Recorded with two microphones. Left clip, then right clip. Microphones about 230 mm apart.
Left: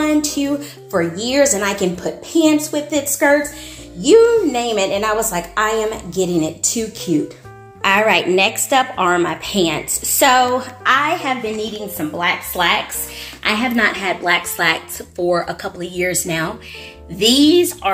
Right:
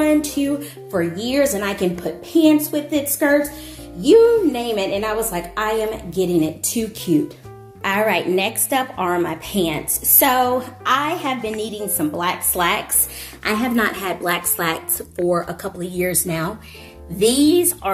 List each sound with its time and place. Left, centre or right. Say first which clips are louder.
0.0 s a woman's voice: even; centre